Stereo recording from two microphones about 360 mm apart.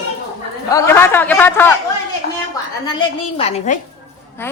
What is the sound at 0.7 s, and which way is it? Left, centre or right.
A man's voice, centre.